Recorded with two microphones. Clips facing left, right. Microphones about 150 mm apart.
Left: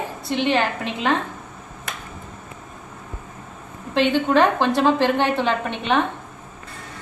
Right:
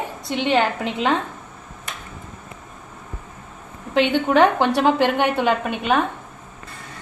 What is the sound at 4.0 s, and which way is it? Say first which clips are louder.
A woman's voice: right 1 dB; 15° right (ahead or behind).